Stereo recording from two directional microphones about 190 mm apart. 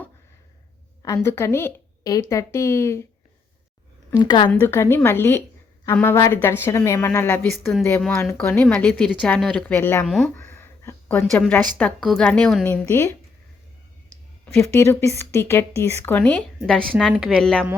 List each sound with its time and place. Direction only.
1.0 s a woman's voice: 15° left (ahead or behind)
4.2 s a woman's voice: 25° left (ahead or behind)
4.6 s a woman's voice: 15° left (ahead or behind)
10.1 s a woman's voice: centre (ahead or behind)
10.3 s a sound: 10° left (ahead or behind)
11.8 s a woman's voice: 5° left (ahead or behind)
14.5 s a woman's voice: 15° left (ahead or behind)